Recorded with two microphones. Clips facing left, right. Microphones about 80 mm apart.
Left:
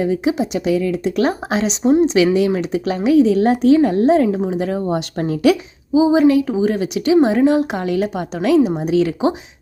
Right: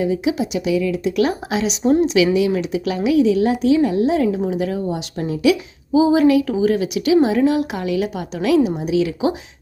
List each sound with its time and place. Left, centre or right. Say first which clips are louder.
0.0 s speech: left 2 dB; left
5.9 s speech: left 1 dB; left